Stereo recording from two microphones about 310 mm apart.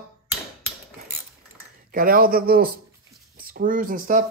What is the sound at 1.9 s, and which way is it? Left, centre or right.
Speech, right.